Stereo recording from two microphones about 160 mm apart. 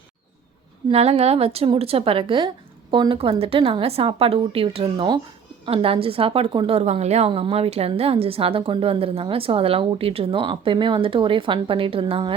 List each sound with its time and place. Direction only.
0.9 s a woman's voice: 40° right (ahead or behind)